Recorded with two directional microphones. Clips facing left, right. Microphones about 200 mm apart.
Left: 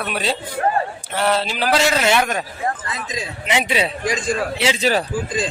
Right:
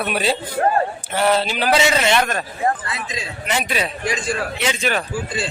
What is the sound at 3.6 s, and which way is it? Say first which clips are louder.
A man's voice: left 2 dB; 25° left (ahead or behind).